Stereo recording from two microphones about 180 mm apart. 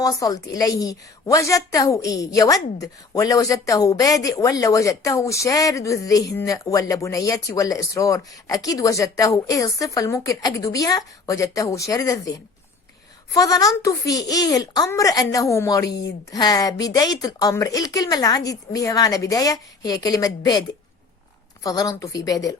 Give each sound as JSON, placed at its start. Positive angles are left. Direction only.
{"t": 0.0, "sound": "a woman's voice", "side_deg": 20}
{"t": 13.3, "sound": "a woman's voice", "side_deg": 20}